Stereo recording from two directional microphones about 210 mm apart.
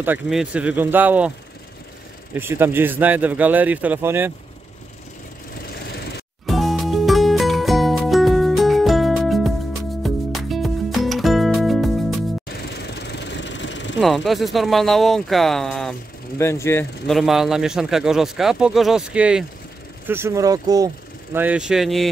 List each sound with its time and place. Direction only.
0.0 s speech: 5° right (ahead or behind)
2.3 s speech: 10° right (ahead or behind)
5.8 s engine: 50° left (ahead or behind)
6.4 s music: centre (ahead or behind)
12.4 s vehicle: 50° left (ahead or behind)
13.9 s speech: centre (ahead or behind)
16.3 s speech: 10° left (ahead or behind)
17.0 s speech: centre (ahead or behind)